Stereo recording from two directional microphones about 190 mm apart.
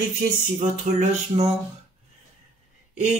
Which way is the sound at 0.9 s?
35° right (ahead or behind).